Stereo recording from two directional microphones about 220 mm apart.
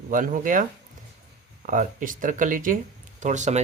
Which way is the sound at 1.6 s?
40° right (ahead or behind).